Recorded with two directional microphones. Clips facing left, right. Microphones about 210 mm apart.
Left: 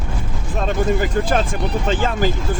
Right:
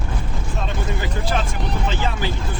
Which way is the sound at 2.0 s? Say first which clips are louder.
Left 6 dB; 45° left (ahead or behind).